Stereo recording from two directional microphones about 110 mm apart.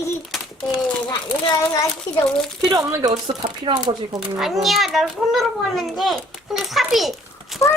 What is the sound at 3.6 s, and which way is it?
Speech, 45° right (ahead or behind).